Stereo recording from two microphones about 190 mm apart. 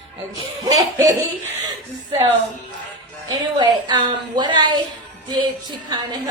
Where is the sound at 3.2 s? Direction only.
25° right (ahead or behind).